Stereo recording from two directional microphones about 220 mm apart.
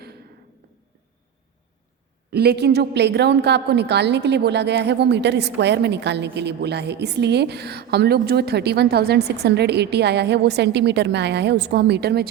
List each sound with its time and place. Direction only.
2.3 s a woman's voice: 45° right (ahead or behind)